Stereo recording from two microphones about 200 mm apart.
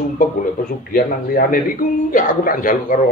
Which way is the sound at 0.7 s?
45° left (ahead or behind).